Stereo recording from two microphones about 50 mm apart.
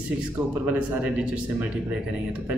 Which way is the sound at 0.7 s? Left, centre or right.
Right.